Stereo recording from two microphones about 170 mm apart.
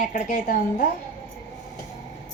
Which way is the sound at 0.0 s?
55° left (ahead or behind).